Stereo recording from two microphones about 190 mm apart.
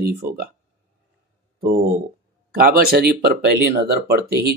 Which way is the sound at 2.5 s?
55° right (ahead or behind).